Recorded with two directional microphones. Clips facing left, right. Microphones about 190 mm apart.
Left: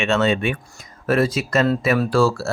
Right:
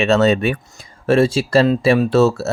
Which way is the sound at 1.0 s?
25° right (ahead or behind).